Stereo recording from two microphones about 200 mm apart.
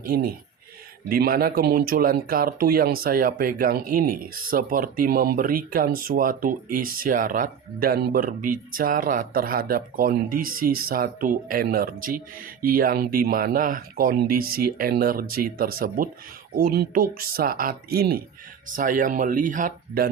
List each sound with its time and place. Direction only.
0.0 s speech: 50° right (ahead or behind)